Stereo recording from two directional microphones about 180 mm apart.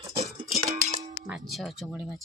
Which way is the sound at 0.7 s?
45° right (ahead or behind).